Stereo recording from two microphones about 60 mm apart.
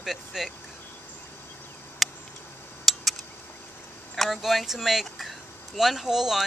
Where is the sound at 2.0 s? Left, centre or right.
Centre.